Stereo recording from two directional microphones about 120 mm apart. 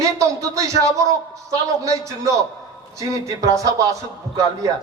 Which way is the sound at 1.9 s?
25° right (ahead or behind).